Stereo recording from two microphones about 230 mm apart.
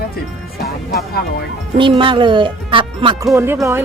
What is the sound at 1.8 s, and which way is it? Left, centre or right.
Speech, right.